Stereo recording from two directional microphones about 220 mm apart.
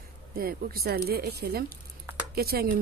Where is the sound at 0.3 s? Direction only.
40° right (ahead or behind).